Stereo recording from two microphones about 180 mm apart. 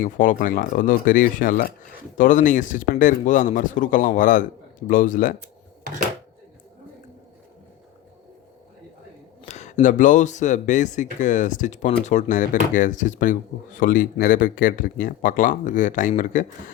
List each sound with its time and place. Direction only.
0.0 s speech: 45° left (ahead or behind)
9.5 s speech: 40° left (ahead or behind)